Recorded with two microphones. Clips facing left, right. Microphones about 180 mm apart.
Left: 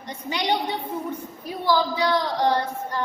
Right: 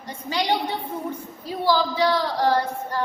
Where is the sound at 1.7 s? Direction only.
15° left (ahead or behind).